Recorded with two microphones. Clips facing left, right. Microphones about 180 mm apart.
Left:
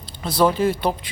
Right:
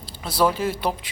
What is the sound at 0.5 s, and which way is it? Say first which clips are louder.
Speech: left 4 dB; 5° right (ahead or behind).